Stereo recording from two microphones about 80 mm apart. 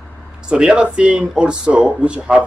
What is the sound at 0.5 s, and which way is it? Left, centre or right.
Speech, centre.